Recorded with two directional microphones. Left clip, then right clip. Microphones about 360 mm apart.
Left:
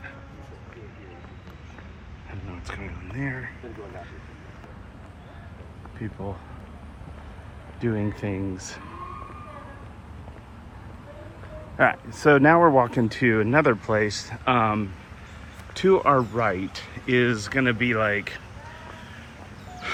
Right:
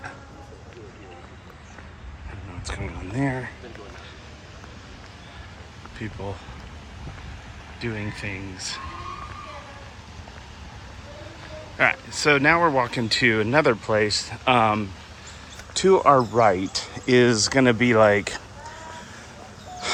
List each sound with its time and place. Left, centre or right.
2.5 s speech: centre
6.0 s speech: centre
7.8 s speech: centre
11.8 s speech: centre